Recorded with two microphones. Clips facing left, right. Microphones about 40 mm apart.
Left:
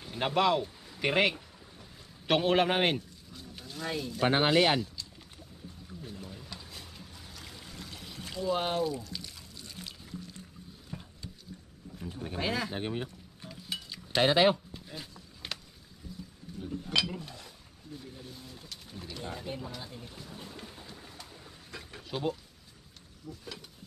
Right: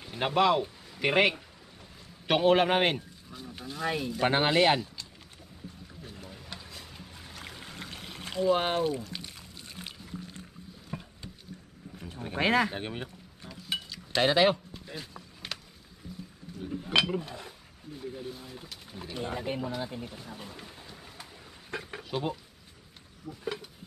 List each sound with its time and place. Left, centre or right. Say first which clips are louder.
0.1 s a man's voice: right 2 dB; centre
6.7 s boat: right 1 dB; right
7.2 s pour: right 6 dB; right
10.9 s a sound: right 4 dB; right
12.2 s speech: right 7 dB; right
12.7 s speech: left 2 dB; right
14.1 s speech: even; centre
16.8 s speech: right 5 dB; right
19.1 s speech: right 6 dB; right
21.6 s a sound: right 8 dB; right
22.0 s speech: left 1 dB; centre
23.2 s speech: right 8 dB; right